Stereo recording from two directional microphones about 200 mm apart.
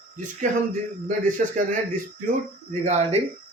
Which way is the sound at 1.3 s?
40° right (ahead or behind).